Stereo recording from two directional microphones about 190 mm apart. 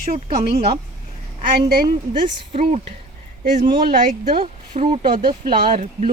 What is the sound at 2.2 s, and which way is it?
Speech, 30° right (ahead or behind).